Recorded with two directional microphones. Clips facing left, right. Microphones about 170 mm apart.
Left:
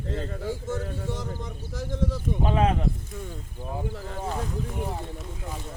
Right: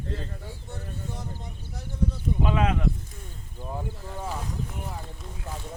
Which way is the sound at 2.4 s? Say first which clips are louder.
Left 2 dB; 35° left (ahead or behind).